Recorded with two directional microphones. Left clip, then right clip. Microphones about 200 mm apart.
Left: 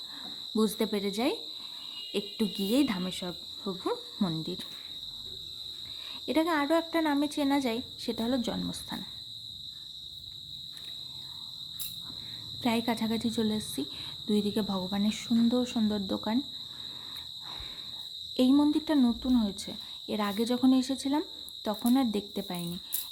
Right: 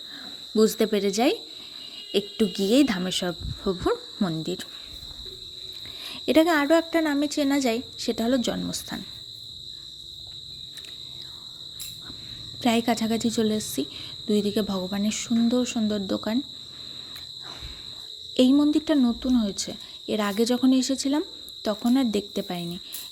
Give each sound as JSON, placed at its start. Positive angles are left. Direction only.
{"t": 0.5, "sound": "speech", "side_deg": -10}
{"t": 4.2, "sound": "speech", "side_deg": -10}
{"t": 6.2, "sound": "speech", "side_deg": -20}
{"t": 12.6, "sound": "speech", "side_deg": -15}
{"t": 18.3, "sound": "speech", "side_deg": -10}